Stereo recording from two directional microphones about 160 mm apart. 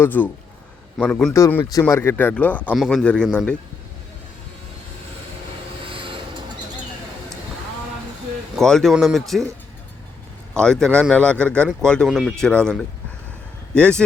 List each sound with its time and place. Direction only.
0.0 s speech: 10° left (ahead or behind)
5.9 s train: 30° right (ahead or behind)
8.5 s speech: centre (ahead or behind)
10.5 s speech: 5° left (ahead or behind)